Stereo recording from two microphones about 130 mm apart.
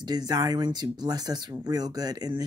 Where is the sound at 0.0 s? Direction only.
30° right (ahead or behind).